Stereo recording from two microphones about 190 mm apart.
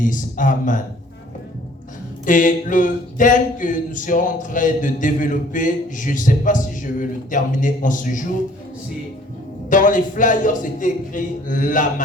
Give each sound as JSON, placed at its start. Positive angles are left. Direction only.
{"t": 0.0, "sound": "speech", "side_deg": 45}
{"t": 2.2, "sound": "speech", "side_deg": 45}
{"t": 9.6, "sound": "speech", "side_deg": 45}